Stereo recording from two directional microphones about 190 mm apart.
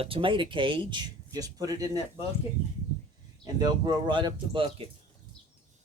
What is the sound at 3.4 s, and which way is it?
Speech, 20° right (ahead or behind).